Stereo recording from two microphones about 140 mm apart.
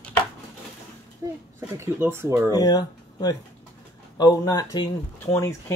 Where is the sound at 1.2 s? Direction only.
20° right (ahead or behind).